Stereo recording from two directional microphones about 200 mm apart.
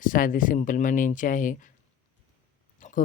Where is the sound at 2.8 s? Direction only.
40° left (ahead or behind).